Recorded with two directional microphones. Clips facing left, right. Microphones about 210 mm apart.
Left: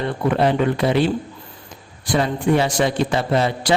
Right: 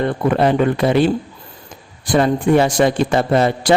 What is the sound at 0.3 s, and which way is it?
Speech, 50° right (ahead or behind).